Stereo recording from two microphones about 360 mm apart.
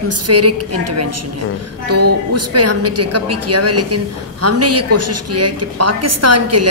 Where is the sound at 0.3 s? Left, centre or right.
Right.